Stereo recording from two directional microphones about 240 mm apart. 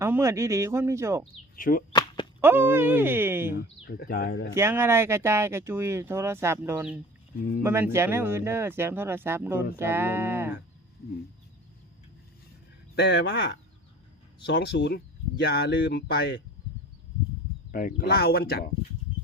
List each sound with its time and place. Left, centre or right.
0.0 s speech: centre
1.5 s speech: left
1.9 s a sound: centre
2.4 s speech: centre
3.5 s speech: left
4.5 s speech: centre
13.0 s speech: left
17.7 s speech: left